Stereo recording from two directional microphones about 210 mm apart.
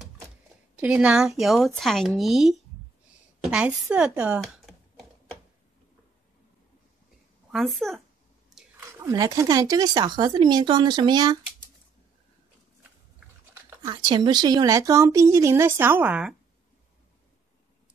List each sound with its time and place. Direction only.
0.7 s speech: 5° right (ahead or behind)
3.4 s a sound: 5° right (ahead or behind)
7.5 s speech: centre (ahead or behind)
8.7 s speech: 15° right (ahead or behind)
13.8 s speech: 20° right (ahead or behind); by 16.3 s 5° right (ahead or behind)